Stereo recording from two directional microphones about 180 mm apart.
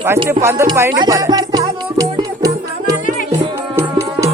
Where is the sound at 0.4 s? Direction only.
15° right (ahead or behind).